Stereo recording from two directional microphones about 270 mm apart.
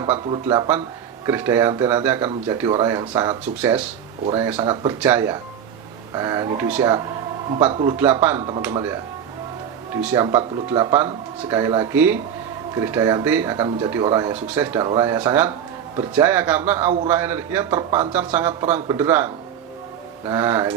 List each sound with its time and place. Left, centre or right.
0.0 s speech: centre
4.9 s speech: centre
7.7 s speech: centre
7.9 s speech: centre